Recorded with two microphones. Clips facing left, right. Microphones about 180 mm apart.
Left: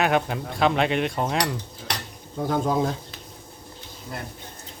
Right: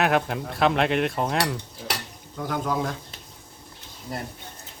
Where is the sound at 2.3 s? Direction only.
30° left (ahead or behind).